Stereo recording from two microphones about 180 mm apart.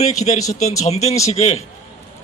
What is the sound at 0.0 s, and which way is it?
A man's voice, 40° left (ahead or behind).